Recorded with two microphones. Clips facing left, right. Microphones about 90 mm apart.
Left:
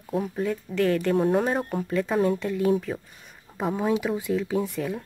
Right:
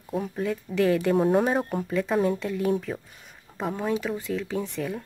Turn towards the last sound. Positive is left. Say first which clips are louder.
# left 3 dB
turn(degrees=5)  # may be behind; listen again after turning